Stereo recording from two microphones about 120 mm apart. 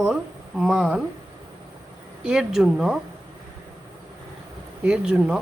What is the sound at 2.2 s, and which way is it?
Speech, 5° right (ahead or behind).